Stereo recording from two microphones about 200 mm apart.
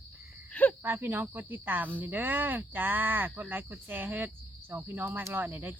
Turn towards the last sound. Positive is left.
turn(degrees=-10)  # may be behind; listen again after turning